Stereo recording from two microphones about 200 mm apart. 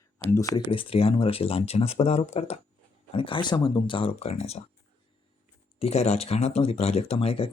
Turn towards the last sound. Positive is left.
turn(degrees=30)  # may be behind; listen again after turning